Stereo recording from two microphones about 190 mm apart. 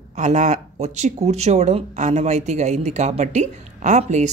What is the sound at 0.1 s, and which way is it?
Speech, 40° right (ahead or behind).